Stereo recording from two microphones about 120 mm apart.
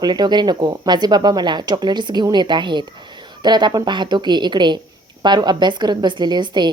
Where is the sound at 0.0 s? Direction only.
35° right (ahead or behind).